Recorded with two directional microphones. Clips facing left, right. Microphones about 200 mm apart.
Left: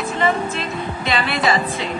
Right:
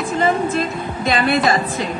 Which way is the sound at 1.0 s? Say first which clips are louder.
Right 5 dB; 45° right (ahead or behind).